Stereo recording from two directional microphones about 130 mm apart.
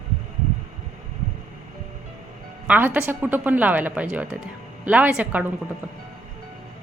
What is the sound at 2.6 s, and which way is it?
A woman's voice, 10° right (ahead or behind).